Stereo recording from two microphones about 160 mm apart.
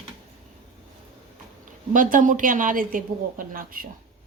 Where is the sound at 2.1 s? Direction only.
55° right (ahead or behind).